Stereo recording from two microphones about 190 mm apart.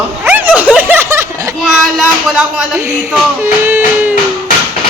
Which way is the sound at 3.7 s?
10° right (ahead or behind).